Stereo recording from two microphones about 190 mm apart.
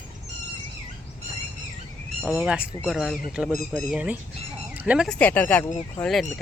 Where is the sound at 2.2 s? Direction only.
5° right (ahead or behind).